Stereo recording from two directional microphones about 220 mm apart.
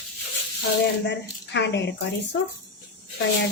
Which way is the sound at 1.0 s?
50° left (ahead or behind).